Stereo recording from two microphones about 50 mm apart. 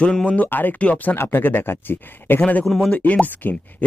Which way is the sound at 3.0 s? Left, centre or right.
Left.